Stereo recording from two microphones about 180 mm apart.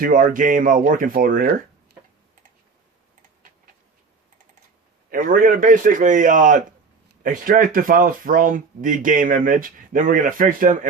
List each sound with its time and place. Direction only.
0.0 s speech: 50° right (ahead or behind)
5.1 s speech: 50° right (ahead or behind)